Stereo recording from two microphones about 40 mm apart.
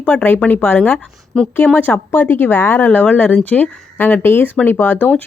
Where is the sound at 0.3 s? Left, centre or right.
Left.